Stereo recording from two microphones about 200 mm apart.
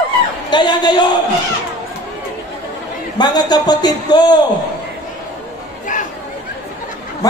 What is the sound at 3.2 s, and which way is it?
A man's voice, 20° left (ahead or behind).